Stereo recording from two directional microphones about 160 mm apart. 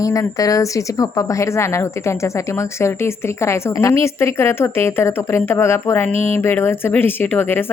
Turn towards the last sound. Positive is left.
turn(degrees=10)  # may be behind; listen again after turning